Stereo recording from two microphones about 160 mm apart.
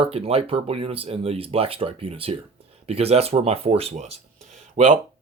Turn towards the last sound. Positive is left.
turn(degrees=-50)  # may be behind; listen again after turning